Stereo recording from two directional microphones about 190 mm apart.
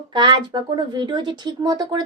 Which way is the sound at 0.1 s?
25° right (ahead or behind).